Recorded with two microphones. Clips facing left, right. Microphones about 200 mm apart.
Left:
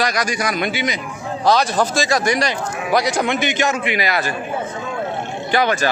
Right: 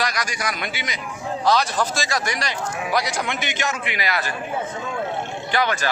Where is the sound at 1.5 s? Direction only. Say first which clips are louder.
Left 4 dB; 45° left (ahead or behind).